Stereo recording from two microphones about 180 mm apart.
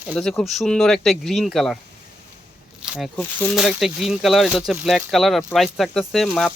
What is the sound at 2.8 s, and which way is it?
Zipper, 5° right (ahead or behind).